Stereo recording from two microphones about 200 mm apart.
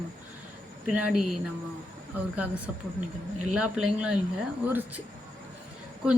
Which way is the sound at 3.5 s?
5° right (ahead or behind).